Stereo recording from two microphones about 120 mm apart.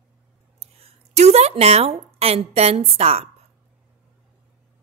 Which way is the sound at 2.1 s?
55° right (ahead or behind).